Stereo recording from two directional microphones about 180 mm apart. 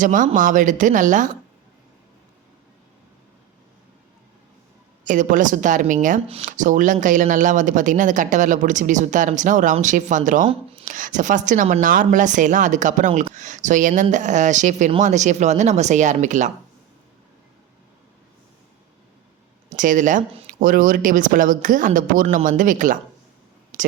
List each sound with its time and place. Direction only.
0.0 s speech: 45° right (ahead or behind)
5.0 s speech: 45° right (ahead or behind)
19.7 s speech: 45° right (ahead or behind)